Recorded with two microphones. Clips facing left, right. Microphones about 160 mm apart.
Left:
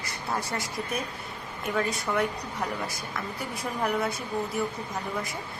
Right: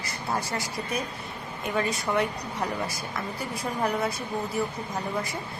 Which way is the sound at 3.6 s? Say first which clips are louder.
Right 1 dB; centre (ahead or behind).